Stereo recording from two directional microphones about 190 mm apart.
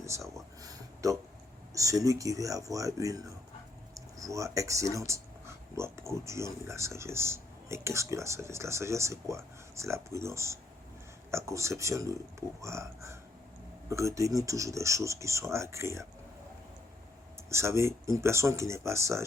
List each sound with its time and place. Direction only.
0.6 s a sound: 20° right (ahead or behind)
1.7 s speech: 15° right (ahead or behind)
17.5 s speech: 15° right (ahead or behind)